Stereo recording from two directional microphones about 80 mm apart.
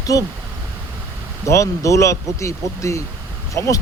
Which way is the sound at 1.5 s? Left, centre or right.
Left.